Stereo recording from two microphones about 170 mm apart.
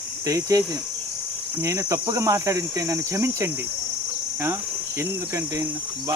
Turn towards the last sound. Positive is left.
turn(degrees=-20)  # may be behind; listen again after turning